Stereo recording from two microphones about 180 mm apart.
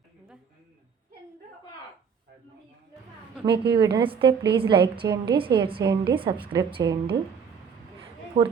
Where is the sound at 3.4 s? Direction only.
65° right (ahead or behind).